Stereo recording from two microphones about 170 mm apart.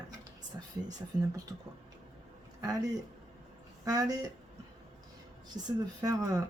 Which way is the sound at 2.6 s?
20° right (ahead or behind).